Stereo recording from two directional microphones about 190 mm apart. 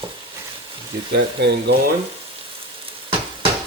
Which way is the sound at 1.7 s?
65° right (ahead or behind).